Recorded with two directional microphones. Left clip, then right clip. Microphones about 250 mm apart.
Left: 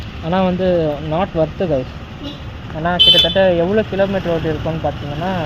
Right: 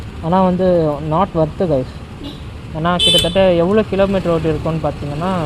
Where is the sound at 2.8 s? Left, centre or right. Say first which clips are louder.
Left 2 dB; right.